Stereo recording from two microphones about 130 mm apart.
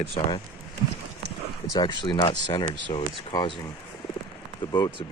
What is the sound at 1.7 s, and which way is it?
Speech, 35° left (ahead or behind).